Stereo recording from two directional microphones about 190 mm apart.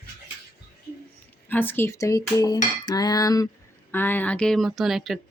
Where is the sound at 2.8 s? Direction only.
20° left (ahead or behind).